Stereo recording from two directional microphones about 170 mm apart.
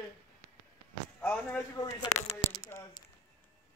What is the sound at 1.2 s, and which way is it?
Speech, 10° left (ahead or behind).